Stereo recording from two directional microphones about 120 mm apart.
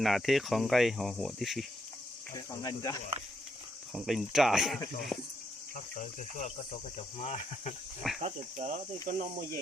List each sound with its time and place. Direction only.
0.0 s cricket: centre (ahead or behind)
2.3 s cricket: 30° left (ahead or behind)
3.9 s cricket: centre (ahead or behind)
5.7 s cricket: 85° left
7.2 s speech: 70° left (ahead or behind)
8.2 s cricket: 80° right